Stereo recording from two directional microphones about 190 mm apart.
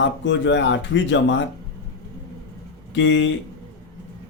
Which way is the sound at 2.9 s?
75° left (ahead or behind).